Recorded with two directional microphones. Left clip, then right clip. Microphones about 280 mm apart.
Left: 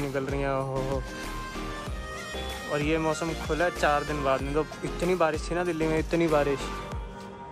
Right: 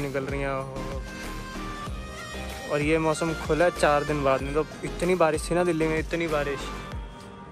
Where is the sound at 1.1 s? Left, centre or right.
Centre.